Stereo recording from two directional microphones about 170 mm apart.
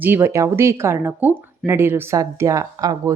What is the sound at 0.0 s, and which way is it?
A woman's voice, 15° right (ahead or behind).